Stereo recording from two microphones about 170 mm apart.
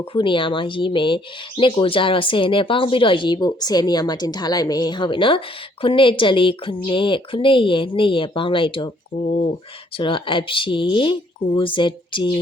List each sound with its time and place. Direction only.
0.0 s a woman's voice: 30° left (ahead or behind)
10.0 s speech: 30° left (ahead or behind)